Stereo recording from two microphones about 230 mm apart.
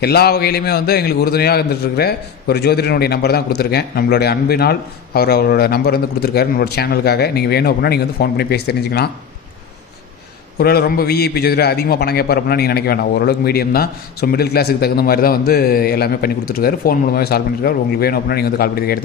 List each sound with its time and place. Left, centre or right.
0.0 s a man's voice: left
10.6 s a man's voice: left